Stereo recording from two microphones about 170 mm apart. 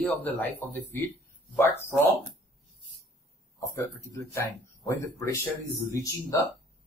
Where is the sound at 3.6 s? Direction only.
15° left (ahead or behind).